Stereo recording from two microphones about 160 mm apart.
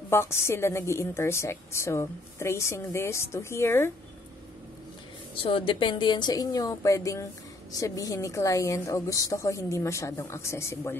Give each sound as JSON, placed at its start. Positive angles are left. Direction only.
{"t": 0.1, "sound": "a woman's voice", "side_deg": 15}
{"t": 5.3, "sound": "a woman's voice", "side_deg": 35}